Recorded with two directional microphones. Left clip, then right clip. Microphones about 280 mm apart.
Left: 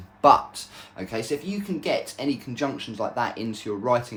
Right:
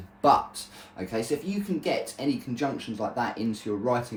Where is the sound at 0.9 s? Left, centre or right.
Centre.